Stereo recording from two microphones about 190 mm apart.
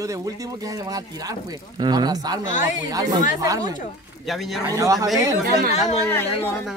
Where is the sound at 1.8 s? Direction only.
20° right (ahead or behind).